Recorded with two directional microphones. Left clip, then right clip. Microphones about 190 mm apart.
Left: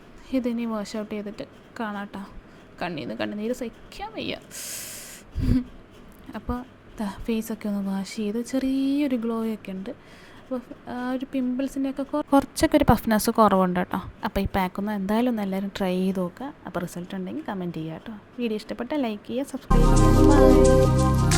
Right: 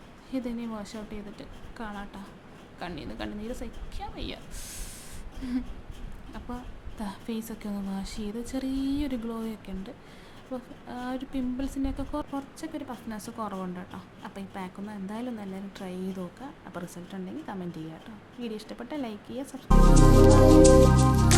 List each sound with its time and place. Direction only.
0.3 s a woman's voice: 25° left (ahead or behind)
5.4 s a sound: 15° left (ahead or behind)
6.3 s a woman's voice: 25° left (ahead or behind)
12.3 s a woman's voice: 45° left (ahead or behind); by 19.6 s 25° left (ahead or behind)
19.6 s music: centre (ahead or behind)